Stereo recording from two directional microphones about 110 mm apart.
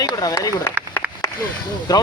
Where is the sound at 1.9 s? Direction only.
35° left (ahead or behind).